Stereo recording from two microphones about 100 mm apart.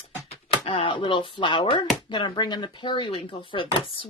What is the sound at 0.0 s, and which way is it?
Speech, 90° left.